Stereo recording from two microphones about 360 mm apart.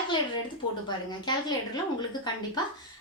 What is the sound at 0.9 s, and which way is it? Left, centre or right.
A woman's voice, centre.